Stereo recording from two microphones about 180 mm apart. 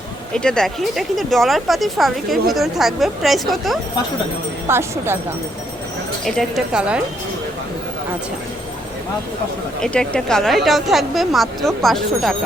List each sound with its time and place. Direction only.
0.3 s speech: 5° left (ahead or behind)
4.7 s speech: 15° right (ahead or behind)
6.2 s speech: centre (ahead or behind)
9.8 s speech: 5° left (ahead or behind)